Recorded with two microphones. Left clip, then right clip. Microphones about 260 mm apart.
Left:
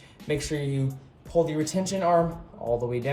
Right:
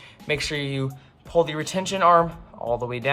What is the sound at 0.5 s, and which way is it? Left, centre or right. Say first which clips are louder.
Speech: right 3 dB; right.